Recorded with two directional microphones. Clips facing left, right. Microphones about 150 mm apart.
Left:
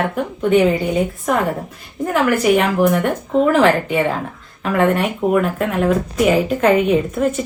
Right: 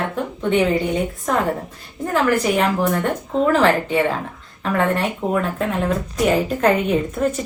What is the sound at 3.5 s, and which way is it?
A woman's voice, 15° left (ahead or behind).